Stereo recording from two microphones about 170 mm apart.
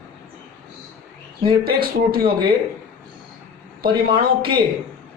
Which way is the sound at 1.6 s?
60° right (ahead or behind).